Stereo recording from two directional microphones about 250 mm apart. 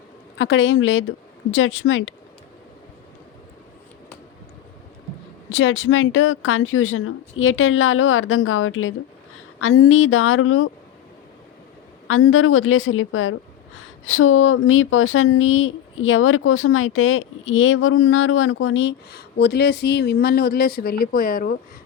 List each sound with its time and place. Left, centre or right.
0.3 s speech: left
5.5 s a woman's voice: left
12.0 s speech: left